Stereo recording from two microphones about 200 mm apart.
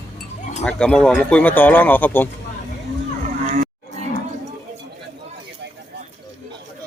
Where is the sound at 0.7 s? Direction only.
5° left (ahead or behind).